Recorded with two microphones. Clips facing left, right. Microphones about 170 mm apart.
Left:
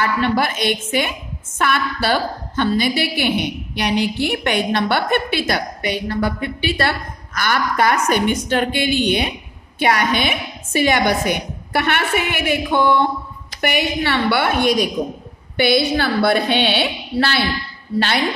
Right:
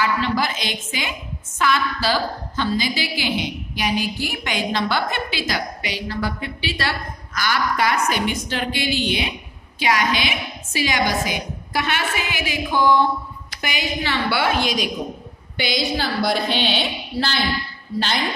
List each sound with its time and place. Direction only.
0.0 s a woman's voice: 55° left (ahead or behind)